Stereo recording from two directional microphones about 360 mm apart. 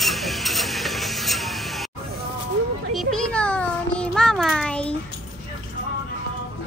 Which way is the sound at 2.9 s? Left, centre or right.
Centre.